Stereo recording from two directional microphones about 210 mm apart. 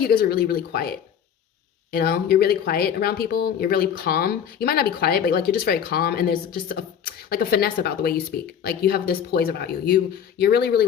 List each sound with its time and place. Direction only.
0.0 s speech: 45° left (ahead or behind)